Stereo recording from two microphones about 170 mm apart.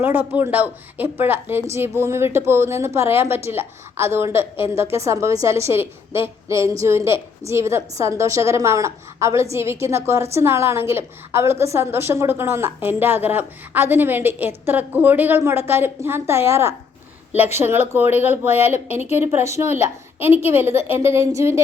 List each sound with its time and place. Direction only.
0.0 s speech: 10° right (ahead or behind)
18.9 s a woman's voice: 40° left (ahead or behind)
19.7 s speech: 10° right (ahead or behind)